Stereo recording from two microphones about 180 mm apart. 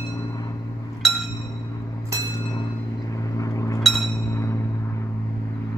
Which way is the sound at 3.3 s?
20° left (ahead or behind).